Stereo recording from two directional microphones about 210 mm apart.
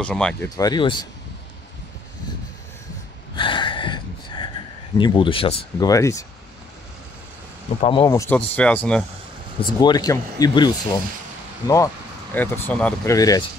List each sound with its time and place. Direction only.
0.0 s speech: 5° left (ahead or behind)
0.6 s speech: 20° left (ahead or behind)
3.3 s gasp: 25° left (ahead or behind)
4.9 s speech: 20° left (ahead or behind)
7.8 s speech: 25° left (ahead or behind); by 9.0 s 5° left (ahead or behind)
9.8 s speech: 20° left (ahead or behind)